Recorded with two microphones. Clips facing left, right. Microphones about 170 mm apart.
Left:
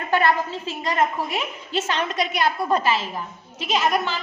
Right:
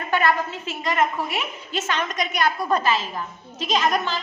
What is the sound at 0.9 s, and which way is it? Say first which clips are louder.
A woman's voice: even; 30° left (ahead or behind).